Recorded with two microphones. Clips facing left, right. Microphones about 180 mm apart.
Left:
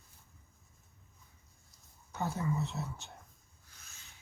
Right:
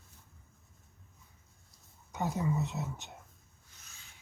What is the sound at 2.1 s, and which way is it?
Speech, 15° right (ahead or behind).